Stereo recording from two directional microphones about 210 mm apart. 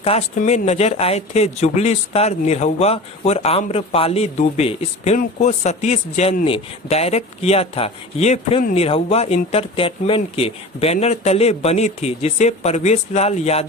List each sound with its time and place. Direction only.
0.0 s speech: 30° left (ahead or behind)